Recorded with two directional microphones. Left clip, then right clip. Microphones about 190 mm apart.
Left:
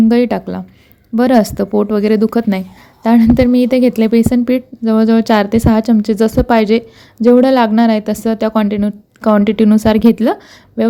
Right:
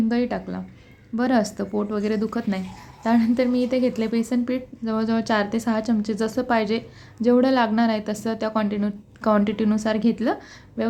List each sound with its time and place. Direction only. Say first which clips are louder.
0.1 s speech: left 11 dB; 45° left (ahead or behind)